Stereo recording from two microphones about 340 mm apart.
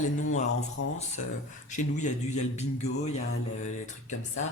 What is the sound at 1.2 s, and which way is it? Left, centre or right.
Speech, left.